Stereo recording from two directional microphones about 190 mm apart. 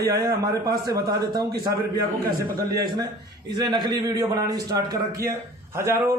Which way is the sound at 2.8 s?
20° right (ahead or behind).